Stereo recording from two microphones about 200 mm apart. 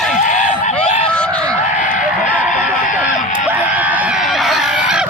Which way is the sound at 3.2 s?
40° left (ahead or behind).